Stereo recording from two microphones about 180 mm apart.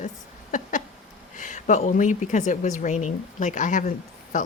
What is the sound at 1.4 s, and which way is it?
Speech, 45° left (ahead or behind).